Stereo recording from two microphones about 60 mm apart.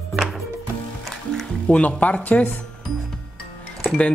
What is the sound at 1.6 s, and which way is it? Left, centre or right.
Speech, left.